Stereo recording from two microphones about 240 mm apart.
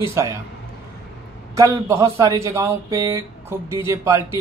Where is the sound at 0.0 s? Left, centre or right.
Centre.